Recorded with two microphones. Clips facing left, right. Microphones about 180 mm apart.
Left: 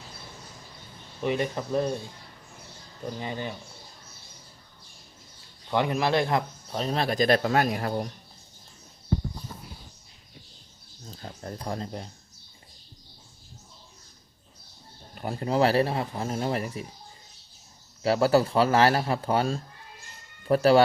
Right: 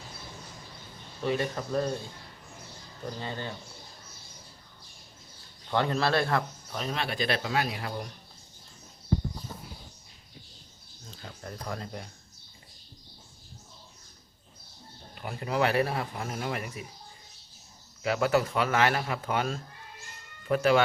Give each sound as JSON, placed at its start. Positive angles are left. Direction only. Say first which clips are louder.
{"t": 1.2, "sound": "a man's voice", "louder": "left 2 dB", "side_deg": 15}
{"t": 3.2, "sound": "a man's voice", "louder": "left 3 dB", "side_deg": 15}
{"t": 5.7, "sound": "a man's voice", "louder": "left 2 dB", "side_deg": 15}
{"t": 6.7, "sound": "speech", "louder": "left 6 dB", "side_deg": 35}
{"t": 11.1, "sound": "speech", "louder": "left 4 dB", "side_deg": 35}
{"t": 15.1, "sound": "speech", "louder": "left 5 dB", "side_deg": 40}
{"t": 18.0, "sound": "speech", "louder": "left 4 dB", "side_deg": 35}